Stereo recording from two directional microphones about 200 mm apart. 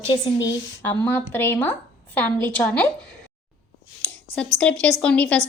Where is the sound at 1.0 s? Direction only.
10° left (ahead or behind).